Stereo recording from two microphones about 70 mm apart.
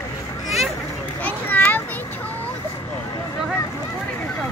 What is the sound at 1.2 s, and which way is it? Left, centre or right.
Children playing, left.